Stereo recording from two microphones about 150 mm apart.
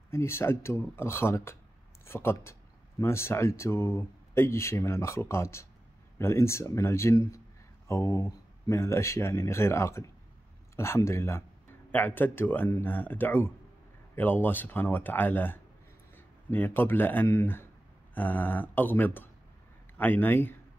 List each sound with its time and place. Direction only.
0.1 s a man's voice: 15° left (ahead or behind)